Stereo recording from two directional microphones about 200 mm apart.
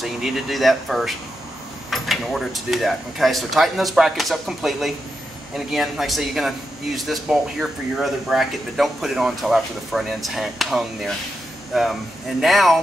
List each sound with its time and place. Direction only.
0.0 s speech: centre (ahead or behind)